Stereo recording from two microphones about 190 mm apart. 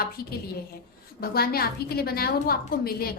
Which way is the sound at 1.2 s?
50° left (ahead or behind).